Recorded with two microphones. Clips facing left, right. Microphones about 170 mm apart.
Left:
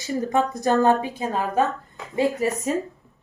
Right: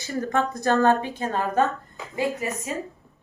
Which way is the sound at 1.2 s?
5° left (ahead or behind).